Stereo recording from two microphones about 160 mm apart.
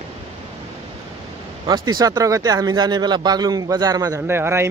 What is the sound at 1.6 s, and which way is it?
Speech, 25° right (ahead or behind).